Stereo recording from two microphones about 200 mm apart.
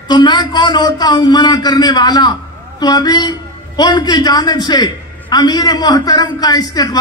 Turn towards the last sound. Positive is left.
turn(degrees=20)  # may be behind; listen again after turning